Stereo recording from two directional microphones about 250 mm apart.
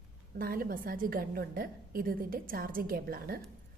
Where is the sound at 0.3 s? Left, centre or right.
Right.